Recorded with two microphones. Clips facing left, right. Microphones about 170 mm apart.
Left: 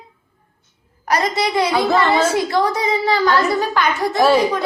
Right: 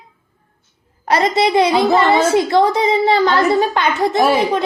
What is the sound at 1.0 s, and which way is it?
A woman's voice, 25° right (ahead or behind).